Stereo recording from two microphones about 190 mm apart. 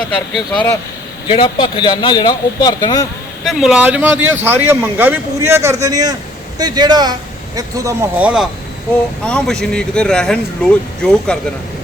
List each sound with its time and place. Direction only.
0.0 s speech: 5° left (ahead or behind)
1.3 s speech: 25° left (ahead or behind)
3.4 s a man's voice: 5° right (ahead or behind); by 7.9 s 20° right (ahead or behind)
8.2 s speech: 5° right (ahead or behind)